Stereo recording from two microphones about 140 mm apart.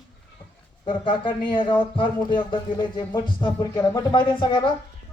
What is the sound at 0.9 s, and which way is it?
A man's voice, 35° left (ahead or behind).